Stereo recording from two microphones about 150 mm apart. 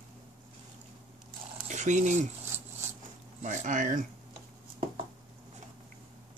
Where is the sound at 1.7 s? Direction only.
55° right (ahead or behind).